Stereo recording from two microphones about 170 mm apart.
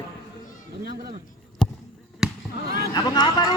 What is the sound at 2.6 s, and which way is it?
Speech, 65° right (ahead or behind).